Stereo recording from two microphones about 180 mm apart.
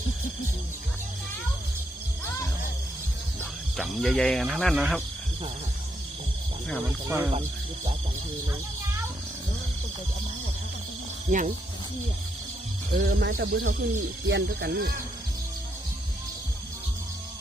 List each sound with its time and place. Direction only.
3.8 s speech: centre (ahead or behind)
11.3 s speech: 45° right (ahead or behind)
12.9 s speech: 65° right (ahead or behind)